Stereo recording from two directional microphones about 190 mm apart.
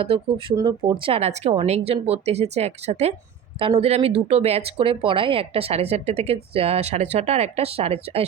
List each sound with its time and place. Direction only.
0.0 s speech: 30° right (ahead or behind)